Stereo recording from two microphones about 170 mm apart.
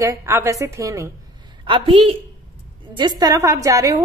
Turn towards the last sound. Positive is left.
turn(degrees=-20)  # may be behind; listen again after turning